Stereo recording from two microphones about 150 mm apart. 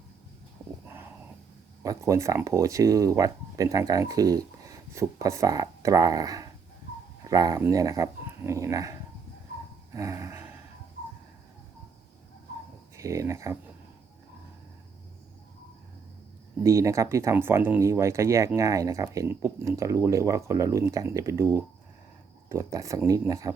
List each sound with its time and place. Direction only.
1.8 s speech: 20° right (ahead or behind)
9.9 s a sound: 20° right (ahead or behind)
13.0 s speech: 20° right (ahead or behind)
16.6 s speech: 20° right (ahead or behind)